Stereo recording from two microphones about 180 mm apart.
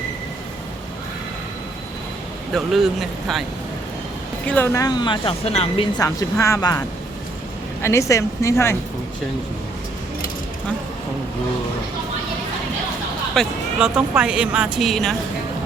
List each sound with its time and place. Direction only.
2.5 s speech: centre (ahead or behind)
4.4 s speech: 10° left (ahead or behind); by 5.9 s 30° left (ahead or behind)
6.0 s speech: 20° left (ahead or behind)
13.3 s speech: centre (ahead or behind)